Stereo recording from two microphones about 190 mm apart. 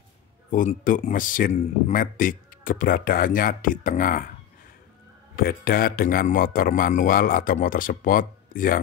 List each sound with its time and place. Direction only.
0.5 s speech: 45° left (ahead or behind)
5.3 s speech: 50° left (ahead or behind)